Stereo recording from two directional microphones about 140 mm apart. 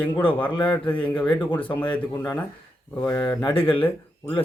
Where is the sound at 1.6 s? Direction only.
35° left (ahead or behind).